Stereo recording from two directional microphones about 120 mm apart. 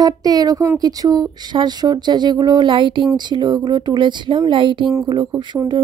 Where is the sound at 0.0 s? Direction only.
30° right (ahead or behind).